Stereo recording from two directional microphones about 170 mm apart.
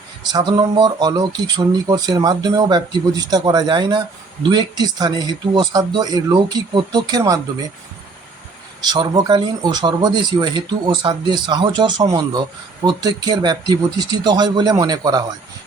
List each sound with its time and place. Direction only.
0.3 s speech: 25° right (ahead or behind)
8.9 s speech: 25° right (ahead or behind)